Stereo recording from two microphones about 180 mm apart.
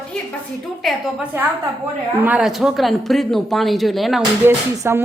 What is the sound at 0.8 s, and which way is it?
Speech, centre (ahead or behind).